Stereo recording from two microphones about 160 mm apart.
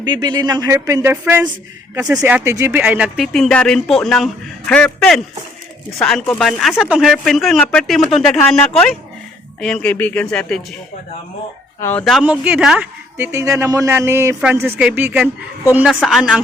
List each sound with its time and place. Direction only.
0.0 s speech: 25° right (ahead or behind); by 5.2 s 5° left (ahead or behind)
6.4 s speech: centre (ahead or behind)
11.8 s speech: 15° left (ahead or behind)
12.0 s a man's voice: 5° right (ahead or behind)